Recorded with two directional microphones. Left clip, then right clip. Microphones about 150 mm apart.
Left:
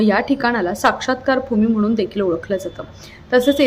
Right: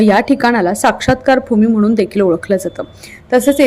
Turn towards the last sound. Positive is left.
turn(degrees=-35)  # may be behind; listen again after turning